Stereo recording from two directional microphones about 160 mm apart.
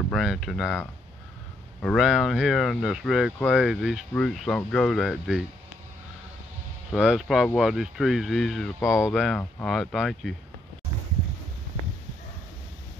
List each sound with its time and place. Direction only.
0.1 s speech: centre (ahead or behind)
1.8 s speech: centre (ahead or behind)
6.9 s speech: 5° right (ahead or behind)
8.8 s speech: 15° left (ahead or behind)
9.1 s speech: centre (ahead or behind)